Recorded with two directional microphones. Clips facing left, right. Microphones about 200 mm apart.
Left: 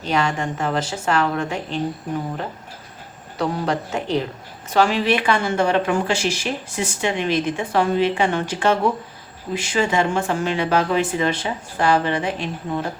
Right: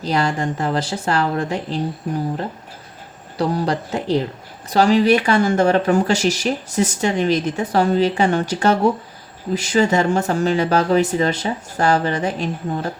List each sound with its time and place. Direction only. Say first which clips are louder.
0.0 s speech: right 2 dB; 35° right (ahead or behind)
3.3 s speech: right 2 dB; 35° right (ahead or behind)